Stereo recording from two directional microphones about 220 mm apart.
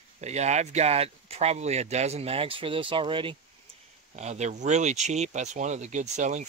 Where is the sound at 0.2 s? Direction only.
30° right (ahead or behind).